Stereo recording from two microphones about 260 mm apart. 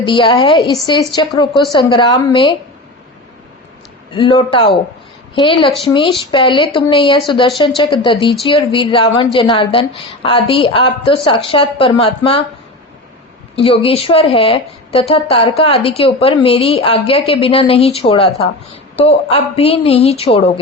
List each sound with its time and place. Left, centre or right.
0.0 s a woman's voice: centre
4.1 s a woman's voice: centre
13.6 s a woman's voice: left